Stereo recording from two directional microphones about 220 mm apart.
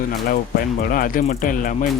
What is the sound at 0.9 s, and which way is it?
Speech, 40° left (ahead or behind).